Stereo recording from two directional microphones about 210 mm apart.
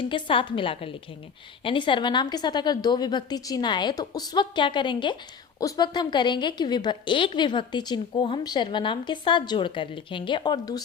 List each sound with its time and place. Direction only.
0.0 s a woman's voice: 25° left (ahead or behind)